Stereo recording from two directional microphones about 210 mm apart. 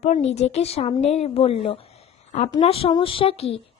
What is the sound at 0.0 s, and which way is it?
A woman's voice, 30° left (ahead or behind).